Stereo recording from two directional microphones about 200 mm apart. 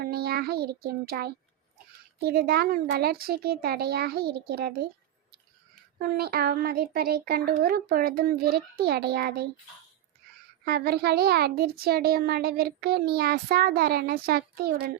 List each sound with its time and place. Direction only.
0.0 s a child's voice: 50° right (ahead or behind)
6.0 s a child's voice: 50° right (ahead or behind)
10.7 s a child's voice: 50° right (ahead or behind)